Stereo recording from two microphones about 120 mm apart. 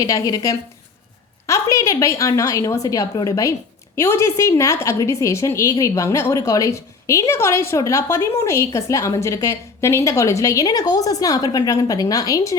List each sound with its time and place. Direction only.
0.0 s a woman's voice: 30° left (ahead or behind)